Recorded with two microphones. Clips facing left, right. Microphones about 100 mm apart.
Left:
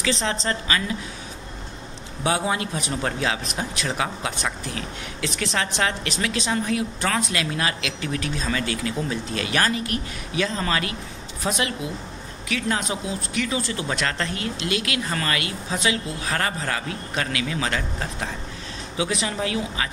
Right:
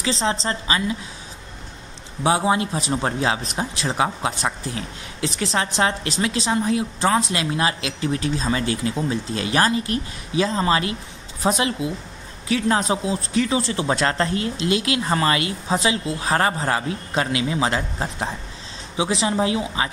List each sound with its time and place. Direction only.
0.0 s a man's voice: 25° right (ahead or behind)
2.2 s a man's voice: 25° right (ahead or behind)